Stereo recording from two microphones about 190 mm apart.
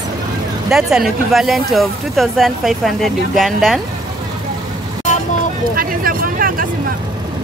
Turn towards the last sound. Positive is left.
turn(degrees=-50)  # may be behind; listen again after turning